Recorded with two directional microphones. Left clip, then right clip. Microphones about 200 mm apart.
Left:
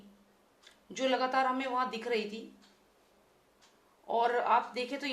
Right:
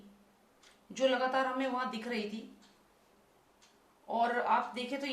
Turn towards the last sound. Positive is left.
turn(degrees=35)  # may be behind; listen again after turning